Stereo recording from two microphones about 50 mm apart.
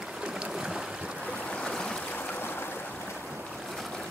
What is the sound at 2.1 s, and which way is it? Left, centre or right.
Stream, left.